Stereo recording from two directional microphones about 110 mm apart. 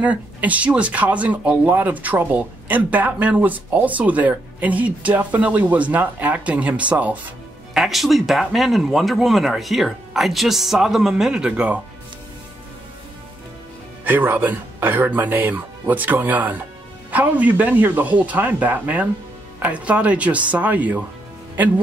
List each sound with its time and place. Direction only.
0.0 s speech: 15° right (ahead or behind)
7.7 s speech: 5° right (ahead or behind)
14.0 s speech: 15° right (ahead or behind)